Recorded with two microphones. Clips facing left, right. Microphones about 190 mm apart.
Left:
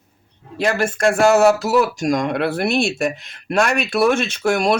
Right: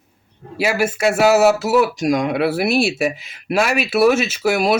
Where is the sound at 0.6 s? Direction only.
5° right (ahead or behind).